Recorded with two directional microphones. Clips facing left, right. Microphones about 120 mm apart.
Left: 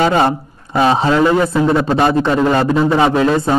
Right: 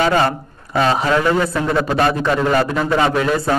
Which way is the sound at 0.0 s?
25° left (ahead or behind).